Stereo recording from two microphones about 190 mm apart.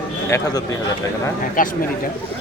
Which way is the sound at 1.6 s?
45° left (ahead or behind).